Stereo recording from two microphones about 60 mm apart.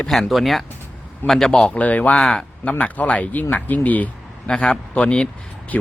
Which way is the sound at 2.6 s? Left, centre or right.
Left.